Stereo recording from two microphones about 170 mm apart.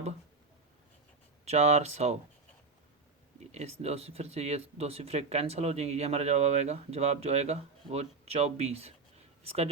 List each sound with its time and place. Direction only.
1.5 s speech: 40° right (ahead or behind)
3.5 s speech: 40° right (ahead or behind)